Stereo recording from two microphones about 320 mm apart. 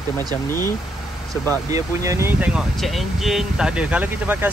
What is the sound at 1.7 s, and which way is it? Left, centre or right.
Speech, centre.